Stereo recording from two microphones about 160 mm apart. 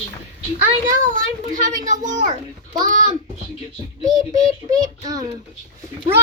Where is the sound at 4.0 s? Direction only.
25° right (ahead or behind).